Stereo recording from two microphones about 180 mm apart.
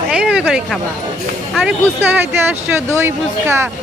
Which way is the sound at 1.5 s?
10° right (ahead or behind).